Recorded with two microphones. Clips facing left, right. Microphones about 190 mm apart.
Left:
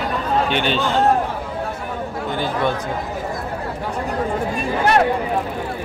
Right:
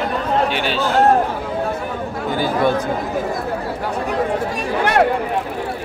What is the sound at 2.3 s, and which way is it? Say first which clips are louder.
Speech: right 4 dB; 10° right (ahead or behind).